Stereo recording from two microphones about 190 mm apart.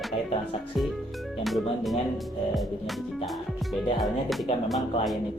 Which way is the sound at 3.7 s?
Centre (ahead or behind).